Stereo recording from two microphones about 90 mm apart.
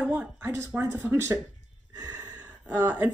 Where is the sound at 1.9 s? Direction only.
45° right (ahead or behind).